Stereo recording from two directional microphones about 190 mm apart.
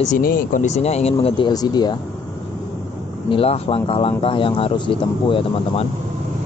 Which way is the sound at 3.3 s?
30° left (ahead or behind).